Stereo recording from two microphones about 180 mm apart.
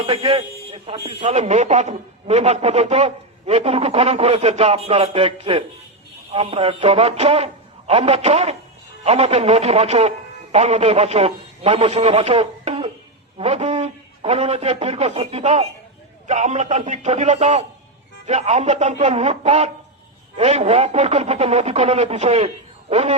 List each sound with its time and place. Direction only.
0.0 s a man's voice: 30° right (ahead or behind)
1.2 s a man's voice: 40° right (ahead or behind)